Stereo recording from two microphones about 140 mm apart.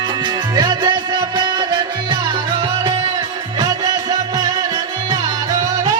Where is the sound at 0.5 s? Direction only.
30° right (ahead or behind).